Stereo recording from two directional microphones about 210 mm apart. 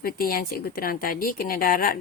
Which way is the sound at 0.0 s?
45° left (ahead or behind).